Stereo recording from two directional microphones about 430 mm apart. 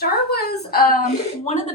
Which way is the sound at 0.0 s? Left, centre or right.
Left.